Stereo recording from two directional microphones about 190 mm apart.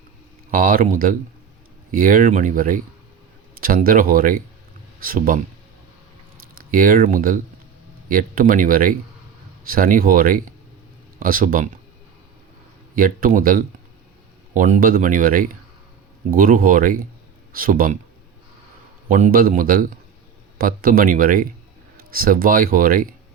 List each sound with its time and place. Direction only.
0.5 s speech: 50° right (ahead or behind)
6.6 s speech: 45° right (ahead or behind)
13.0 s speech: 45° right (ahead or behind)
19.0 s speech: 45° right (ahead or behind)